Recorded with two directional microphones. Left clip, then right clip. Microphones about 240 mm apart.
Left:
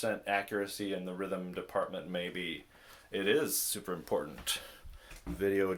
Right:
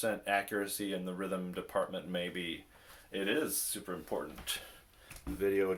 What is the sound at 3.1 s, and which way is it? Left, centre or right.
Speech, left.